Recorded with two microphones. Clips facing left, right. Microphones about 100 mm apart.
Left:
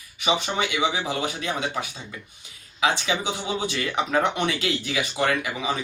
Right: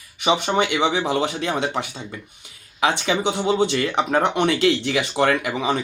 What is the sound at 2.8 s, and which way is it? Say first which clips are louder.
Speech: right 4 dB; 60° right (ahead or behind).